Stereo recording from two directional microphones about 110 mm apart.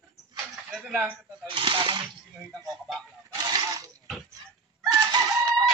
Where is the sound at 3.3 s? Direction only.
35° right (ahead or behind).